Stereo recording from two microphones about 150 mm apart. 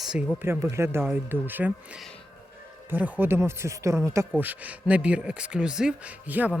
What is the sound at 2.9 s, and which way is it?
Speech, 15° right (ahead or behind).